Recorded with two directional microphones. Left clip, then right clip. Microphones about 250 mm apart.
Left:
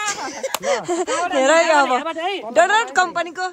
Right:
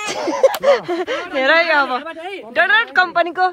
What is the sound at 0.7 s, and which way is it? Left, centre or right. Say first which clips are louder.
Speech: right 5 dB; centre.